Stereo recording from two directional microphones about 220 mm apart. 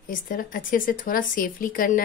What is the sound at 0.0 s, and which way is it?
A woman's voice, 40° left (ahead or behind).